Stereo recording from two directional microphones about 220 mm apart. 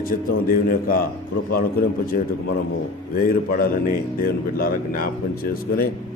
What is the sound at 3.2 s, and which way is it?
A man's voice, 40° left (ahead or behind).